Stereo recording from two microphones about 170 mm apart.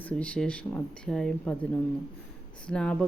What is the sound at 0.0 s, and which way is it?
Speech, 10° left (ahead or behind).